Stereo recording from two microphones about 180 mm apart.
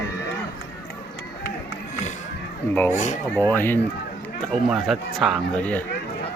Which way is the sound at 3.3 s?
10° left (ahead or behind).